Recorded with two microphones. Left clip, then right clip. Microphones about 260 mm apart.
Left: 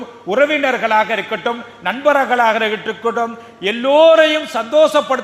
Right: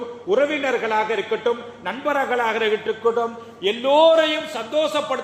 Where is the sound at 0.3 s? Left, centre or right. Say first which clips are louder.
Left 5 dB; left.